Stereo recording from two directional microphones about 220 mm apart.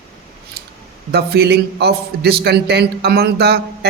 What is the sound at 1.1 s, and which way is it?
A man's voice, 50° right (ahead or behind).